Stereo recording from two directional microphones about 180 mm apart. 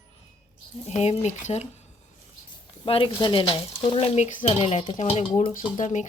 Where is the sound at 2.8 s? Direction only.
30° left (ahead or behind).